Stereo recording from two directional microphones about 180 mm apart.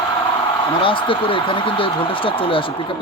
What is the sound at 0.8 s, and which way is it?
Speech, 30° left (ahead or behind).